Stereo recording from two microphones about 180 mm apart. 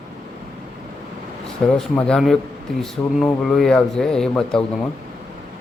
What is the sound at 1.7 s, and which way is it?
Speech, 5° left (ahead or behind).